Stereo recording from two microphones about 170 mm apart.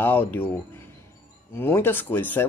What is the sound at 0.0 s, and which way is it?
Speech, 10° left (ahead or behind).